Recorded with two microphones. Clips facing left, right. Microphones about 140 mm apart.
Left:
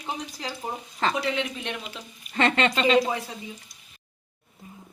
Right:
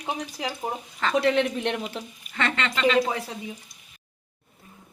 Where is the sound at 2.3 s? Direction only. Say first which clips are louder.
Left 5 dB; 30° left (ahead or behind).